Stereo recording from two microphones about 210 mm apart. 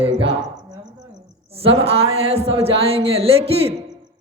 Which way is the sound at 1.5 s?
30° right (ahead or behind).